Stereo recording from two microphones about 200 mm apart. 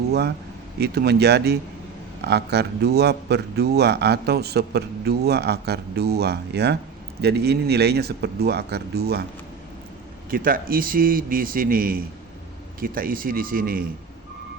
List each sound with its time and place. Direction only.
0.1 s speech: 55° right (ahead or behind)
10.2 s a man's voice: 45° right (ahead or behind)